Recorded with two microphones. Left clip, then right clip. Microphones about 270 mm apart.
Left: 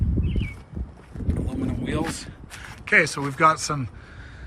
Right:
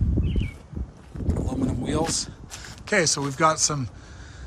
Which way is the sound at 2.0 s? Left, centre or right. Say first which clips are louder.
Right 3 dB; centre.